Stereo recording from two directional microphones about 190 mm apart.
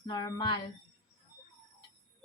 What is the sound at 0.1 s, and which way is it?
Speech, 20° left (ahead or behind).